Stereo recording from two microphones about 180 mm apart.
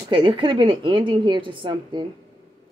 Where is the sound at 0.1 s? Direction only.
30° right (ahead or behind).